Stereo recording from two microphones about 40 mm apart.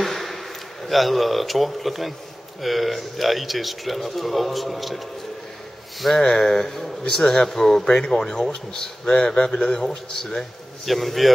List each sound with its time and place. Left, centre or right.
0.0 s a sound: centre
0.8 s speech: centre
6.1 s speech: centre